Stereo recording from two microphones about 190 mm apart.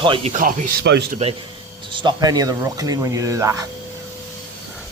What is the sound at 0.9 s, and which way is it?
Speech, 65° right (ahead or behind).